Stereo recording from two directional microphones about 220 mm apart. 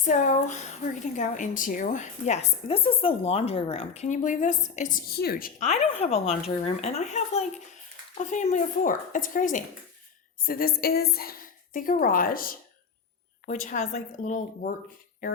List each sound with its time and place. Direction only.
0.0 s a woman's voice: 35° left (ahead or behind)